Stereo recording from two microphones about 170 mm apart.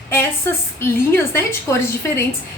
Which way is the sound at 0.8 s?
15° left (ahead or behind).